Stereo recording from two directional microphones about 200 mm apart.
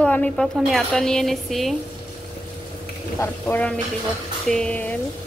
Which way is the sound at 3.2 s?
5° left (ahead or behind).